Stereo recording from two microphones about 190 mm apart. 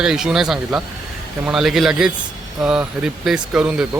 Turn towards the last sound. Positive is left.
turn(degrees=-5)  # may be behind; listen again after turning